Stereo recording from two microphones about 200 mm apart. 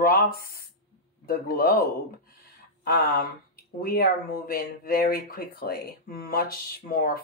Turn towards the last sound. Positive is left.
turn(degrees=50)  # may be behind; listen again after turning